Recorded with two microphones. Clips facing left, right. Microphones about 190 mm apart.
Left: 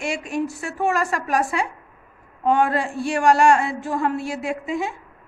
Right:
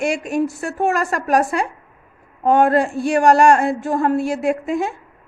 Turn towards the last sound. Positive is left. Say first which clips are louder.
# right 6 dB
turn(degrees=-50)  # may be behind; listen again after turning